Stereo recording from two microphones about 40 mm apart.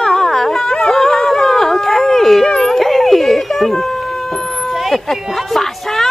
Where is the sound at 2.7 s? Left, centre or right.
Centre.